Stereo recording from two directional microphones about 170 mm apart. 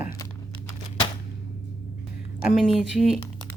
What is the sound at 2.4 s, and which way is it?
Speech, 5° right (ahead or behind).